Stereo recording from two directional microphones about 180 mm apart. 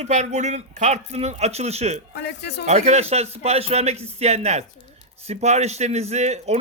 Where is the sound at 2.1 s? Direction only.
70° left (ahead or behind).